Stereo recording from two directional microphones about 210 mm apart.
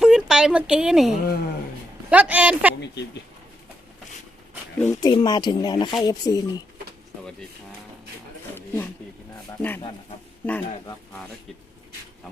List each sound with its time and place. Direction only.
0.0 s a sound: 5° right (ahead or behind)
2.0 s a man's voice: 5° right (ahead or behind)
2.8 s speech: 55° left (ahead or behind)
4.8 s speech: 15° left (ahead or behind)
8.5 s a sound: 10° left (ahead or behind)
9.6 s speech: 10° left (ahead or behind)